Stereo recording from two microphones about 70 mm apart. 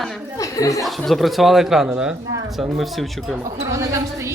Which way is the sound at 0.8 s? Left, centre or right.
Centre.